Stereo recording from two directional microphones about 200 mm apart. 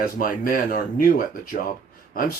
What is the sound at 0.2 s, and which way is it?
Speech, 45° left (ahead or behind).